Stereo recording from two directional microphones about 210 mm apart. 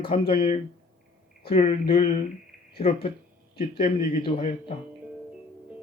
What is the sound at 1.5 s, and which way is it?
Speech, 30° left (ahead or behind).